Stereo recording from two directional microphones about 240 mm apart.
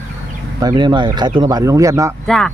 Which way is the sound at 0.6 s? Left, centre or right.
Centre.